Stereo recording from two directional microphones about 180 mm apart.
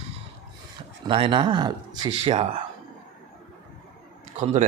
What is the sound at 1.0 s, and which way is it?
Speech, 30° right (ahead or behind).